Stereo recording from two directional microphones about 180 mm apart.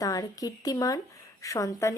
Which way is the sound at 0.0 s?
20° left (ahead or behind).